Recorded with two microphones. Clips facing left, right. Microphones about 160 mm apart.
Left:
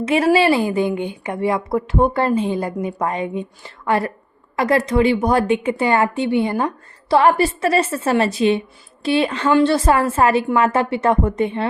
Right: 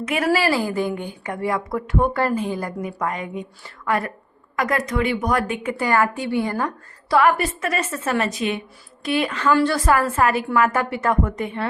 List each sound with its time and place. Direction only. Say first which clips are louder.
0.0 s a woman's voice: left 5 dB; 30° left (ahead or behind)